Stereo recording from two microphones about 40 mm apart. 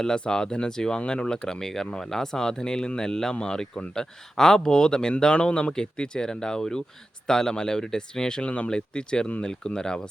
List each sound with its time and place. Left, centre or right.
0.0 s speech: centre